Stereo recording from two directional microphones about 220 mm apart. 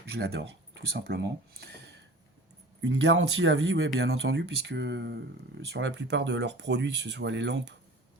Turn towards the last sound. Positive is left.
turn(degrees=-55)  # may be behind; listen again after turning